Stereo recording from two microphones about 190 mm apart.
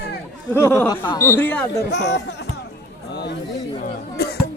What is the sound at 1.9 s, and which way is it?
Speech, 65° left (ahead or behind).